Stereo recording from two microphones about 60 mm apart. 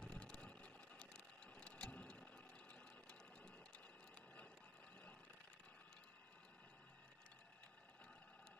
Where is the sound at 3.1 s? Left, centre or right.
Centre.